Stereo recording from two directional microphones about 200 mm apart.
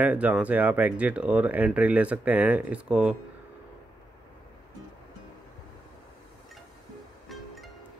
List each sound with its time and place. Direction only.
0.0 s speech: 5° right (ahead or behind)
7.2 s music: centre (ahead or behind)